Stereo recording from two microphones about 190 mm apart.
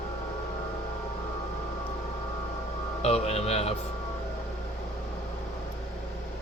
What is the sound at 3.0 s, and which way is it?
Speech, 35° left (ahead or behind).